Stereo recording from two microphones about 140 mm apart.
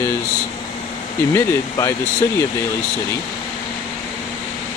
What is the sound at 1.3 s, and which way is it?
Speech, 25° left (ahead or behind).